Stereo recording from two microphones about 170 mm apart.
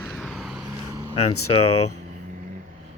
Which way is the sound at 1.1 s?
40° left (ahead or behind).